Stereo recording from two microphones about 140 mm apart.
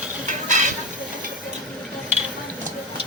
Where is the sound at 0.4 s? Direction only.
60° right (ahead or behind).